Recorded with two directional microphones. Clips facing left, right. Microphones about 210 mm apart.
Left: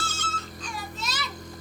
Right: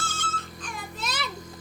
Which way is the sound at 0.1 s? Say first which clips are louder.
Even; 50° right (ahead or behind).